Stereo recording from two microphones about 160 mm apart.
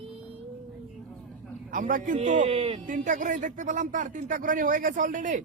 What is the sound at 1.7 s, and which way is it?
Speech, 55° right (ahead or behind).